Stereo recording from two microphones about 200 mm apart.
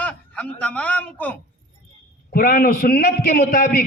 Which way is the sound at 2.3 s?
45° left (ahead or behind).